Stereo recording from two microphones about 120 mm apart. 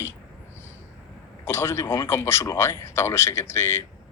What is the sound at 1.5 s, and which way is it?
Speech, 20° left (ahead or behind).